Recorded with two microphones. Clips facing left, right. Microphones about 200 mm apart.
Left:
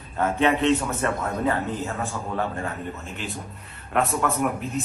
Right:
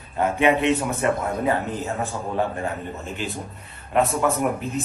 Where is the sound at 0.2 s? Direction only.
15° right (ahead or behind).